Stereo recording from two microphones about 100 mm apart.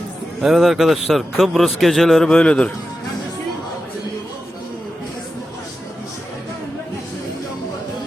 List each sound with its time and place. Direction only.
0.4 s a man's voice: 5° right (ahead or behind)